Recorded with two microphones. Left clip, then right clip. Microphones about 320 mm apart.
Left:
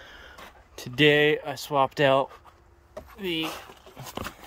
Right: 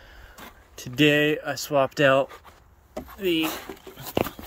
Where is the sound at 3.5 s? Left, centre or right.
Right.